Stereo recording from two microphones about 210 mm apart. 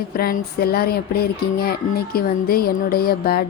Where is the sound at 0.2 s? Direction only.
45° left (ahead or behind).